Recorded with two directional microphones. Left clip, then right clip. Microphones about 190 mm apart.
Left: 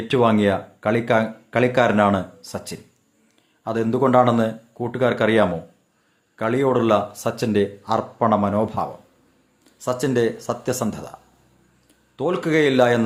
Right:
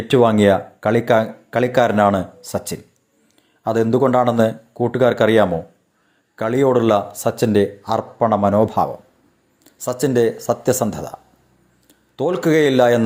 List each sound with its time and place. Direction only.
0.1 s speech: 25° right (ahead or behind)